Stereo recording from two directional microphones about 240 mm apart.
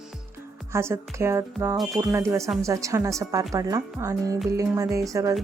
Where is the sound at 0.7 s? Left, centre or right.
Centre.